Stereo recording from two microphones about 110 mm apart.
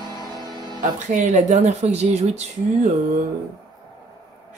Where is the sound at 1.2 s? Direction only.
90° right.